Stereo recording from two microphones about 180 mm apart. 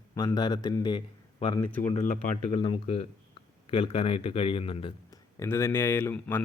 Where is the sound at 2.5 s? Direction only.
30° left (ahead or behind).